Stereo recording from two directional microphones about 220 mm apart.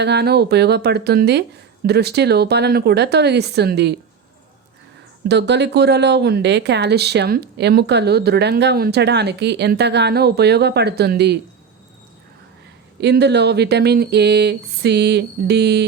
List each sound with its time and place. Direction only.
0.0 s speech: 50° right (ahead or behind)
5.3 s speech: 50° right (ahead or behind)
13.0 s speech: 50° right (ahead or behind)